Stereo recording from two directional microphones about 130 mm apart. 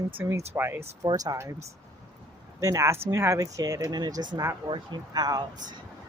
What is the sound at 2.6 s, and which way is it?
Speech, 25° right (ahead or behind).